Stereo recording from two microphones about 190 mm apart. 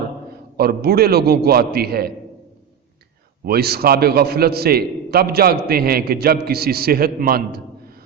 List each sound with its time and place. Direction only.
0.5 s a man's voice: 55° right (ahead or behind)
3.4 s a man's voice: 55° right (ahead or behind)